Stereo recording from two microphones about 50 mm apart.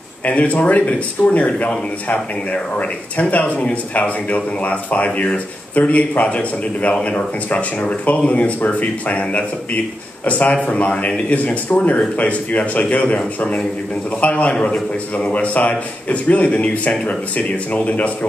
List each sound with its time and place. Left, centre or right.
0.2 s speech: left
14.2 s speech: left